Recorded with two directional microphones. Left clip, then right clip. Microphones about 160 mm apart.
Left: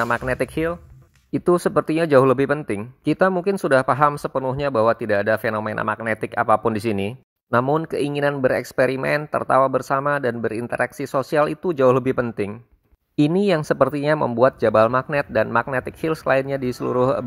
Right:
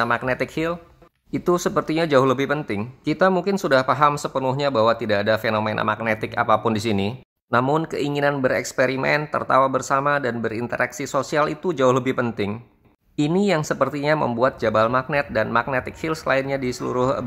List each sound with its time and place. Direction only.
0.0 s speech: 35° left (ahead or behind)